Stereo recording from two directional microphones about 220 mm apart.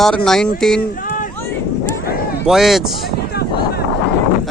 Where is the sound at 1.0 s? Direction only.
35° left (ahead or behind).